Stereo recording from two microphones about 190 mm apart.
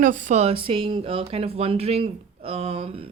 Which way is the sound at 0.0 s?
40° right (ahead or behind).